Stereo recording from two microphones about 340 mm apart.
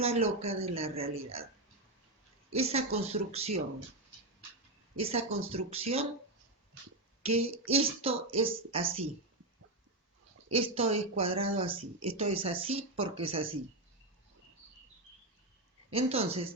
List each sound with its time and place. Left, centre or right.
0.0 s speech: centre
2.5 s speech: centre
4.9 s speech: centre
7.2 s child singing: centre
7.7 s speech: centre
10.5 s speech: centre
15.9 s speech: centre